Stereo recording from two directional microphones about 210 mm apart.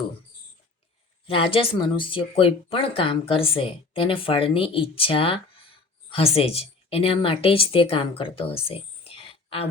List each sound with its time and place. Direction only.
1.4 s speech: 25° left (ahead or behind)